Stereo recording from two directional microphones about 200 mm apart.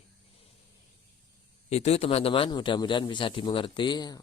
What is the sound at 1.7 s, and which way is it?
Speech, 30° left (ahead or behind).